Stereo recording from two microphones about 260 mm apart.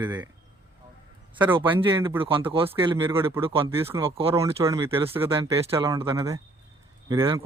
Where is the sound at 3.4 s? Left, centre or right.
Centre.